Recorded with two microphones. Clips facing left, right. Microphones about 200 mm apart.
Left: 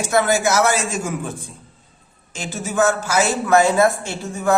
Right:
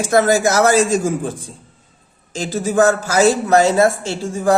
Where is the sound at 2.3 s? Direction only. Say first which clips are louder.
Right 5 dB; 35° right (ahead or behind).